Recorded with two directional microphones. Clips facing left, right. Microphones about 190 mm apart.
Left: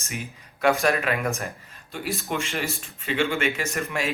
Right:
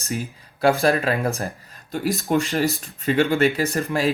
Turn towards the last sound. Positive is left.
turn(degrees=-35)  # may be behind; listen again after turning